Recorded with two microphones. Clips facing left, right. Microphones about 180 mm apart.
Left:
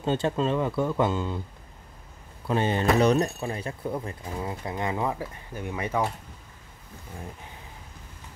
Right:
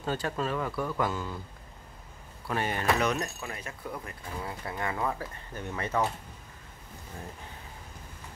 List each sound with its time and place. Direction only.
0.0 s speech: 25° left (ahead or behind)
2.4 s speech: 25° left (ahead or behind)